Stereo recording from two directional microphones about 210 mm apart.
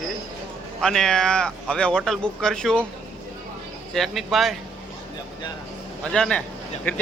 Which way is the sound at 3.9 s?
Centre (ahead or behind).